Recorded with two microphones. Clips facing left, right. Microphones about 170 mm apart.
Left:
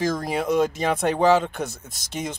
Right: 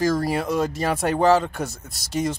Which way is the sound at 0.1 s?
Centre (ahead or behind).